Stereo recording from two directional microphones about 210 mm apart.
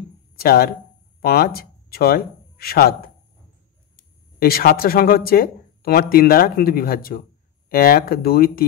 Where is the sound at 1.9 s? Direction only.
45° left (ahead or behind).